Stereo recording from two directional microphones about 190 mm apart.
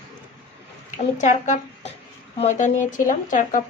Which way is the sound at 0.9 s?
40° left (ahead or behind).